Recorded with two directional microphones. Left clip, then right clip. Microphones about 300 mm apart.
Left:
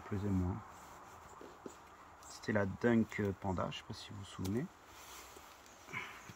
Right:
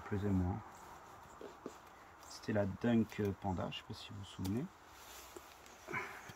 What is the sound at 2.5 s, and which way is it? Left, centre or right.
Speech, centre.